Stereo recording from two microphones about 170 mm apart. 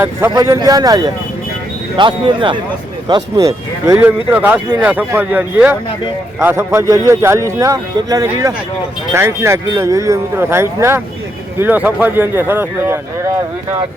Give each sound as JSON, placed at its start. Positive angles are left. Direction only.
{"t": 0.0, "sound": "speech", "side_deg": -15}